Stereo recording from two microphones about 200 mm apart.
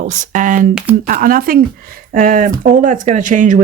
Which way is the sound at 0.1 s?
40° right (ahead or behind).